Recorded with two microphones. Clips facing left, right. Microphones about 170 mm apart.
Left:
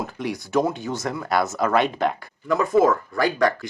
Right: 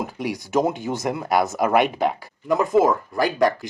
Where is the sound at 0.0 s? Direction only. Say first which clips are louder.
Right 1 dB; 10° right (ahead or behind).